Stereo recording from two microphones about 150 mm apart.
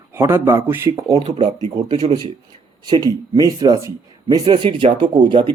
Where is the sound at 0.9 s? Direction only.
30° right (ahead or behind).